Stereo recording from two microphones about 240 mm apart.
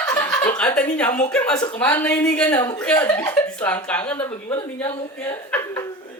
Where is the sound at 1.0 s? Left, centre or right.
Centre.